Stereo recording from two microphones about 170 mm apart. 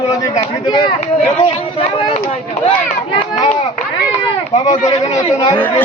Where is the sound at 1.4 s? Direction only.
35° left (ahead or behind).